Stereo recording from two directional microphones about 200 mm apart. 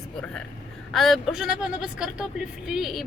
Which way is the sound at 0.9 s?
Centre (ahead or behind).